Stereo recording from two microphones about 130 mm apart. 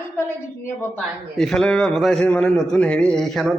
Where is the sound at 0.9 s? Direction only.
5° left (ahead or behind).